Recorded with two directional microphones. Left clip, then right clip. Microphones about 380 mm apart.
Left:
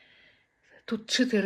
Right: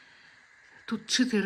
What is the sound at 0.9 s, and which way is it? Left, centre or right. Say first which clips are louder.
Speech: left 1 dB; centre.